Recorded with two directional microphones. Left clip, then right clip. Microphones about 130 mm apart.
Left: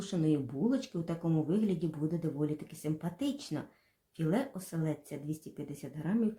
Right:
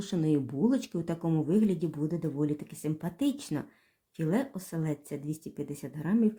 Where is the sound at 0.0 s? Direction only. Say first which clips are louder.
Right 3 dB; 35° right (ahead or behind).